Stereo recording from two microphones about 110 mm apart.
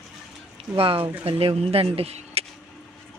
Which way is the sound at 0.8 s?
55° right (ahead or behind).